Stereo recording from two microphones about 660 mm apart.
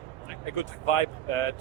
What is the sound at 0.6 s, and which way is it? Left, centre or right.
Speech, left.